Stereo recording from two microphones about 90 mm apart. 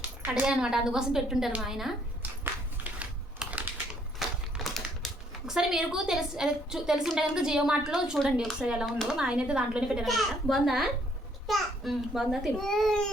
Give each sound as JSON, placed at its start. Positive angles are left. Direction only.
{"t": 0.3, "sound": "a woman's voice", "side_deg": -10}
{"t": 2.2, "sound": "a sound", "side_deg": -20}
{"t": 3.4, "sound": "typing", "side_deg": -5}
{"t": 4.2, "sound": "typewriter", "side_deg": -5}
{"t": 5.5, "sound": "a woman's voice", "side_deg": -5}
{"t": 10.1, "sound": "a woman's voice", "side_deg": 0}